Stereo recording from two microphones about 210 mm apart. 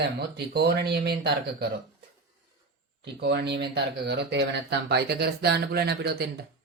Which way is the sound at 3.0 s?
55° right (ahead or behind).